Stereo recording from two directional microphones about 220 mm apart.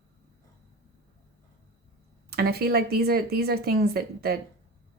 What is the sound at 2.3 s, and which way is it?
A woman's voice, 45° right (ahead or behind).